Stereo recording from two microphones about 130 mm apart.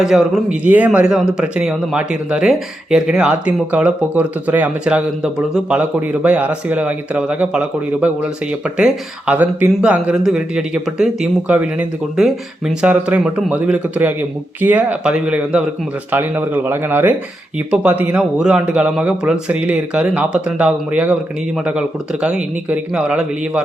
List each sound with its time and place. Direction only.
0.0 s speech: 5° right (ahead or behind)